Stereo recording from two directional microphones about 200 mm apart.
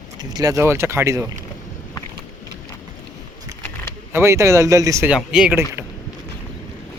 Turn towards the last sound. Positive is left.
turn(degrees=-10)  # may be behind; listen again after turning